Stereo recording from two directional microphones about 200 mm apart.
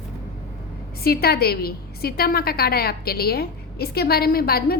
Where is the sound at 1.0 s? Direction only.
50° left (ahead or behind).